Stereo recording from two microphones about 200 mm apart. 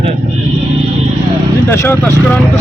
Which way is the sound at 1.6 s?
10° left (ahead or behind).